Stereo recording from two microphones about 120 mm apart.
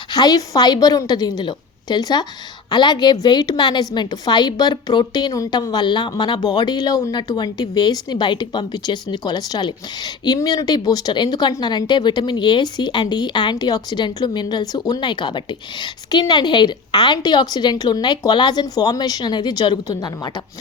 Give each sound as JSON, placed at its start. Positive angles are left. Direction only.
{"t": 0.1, "sound": "a woman's voice", "side_deg": 35}